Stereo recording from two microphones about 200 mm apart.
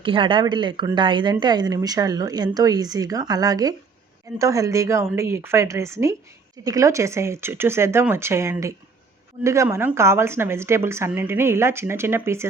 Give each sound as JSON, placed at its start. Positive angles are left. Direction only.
{"t": 0.0, "sound": "speech", "side_deg": -25}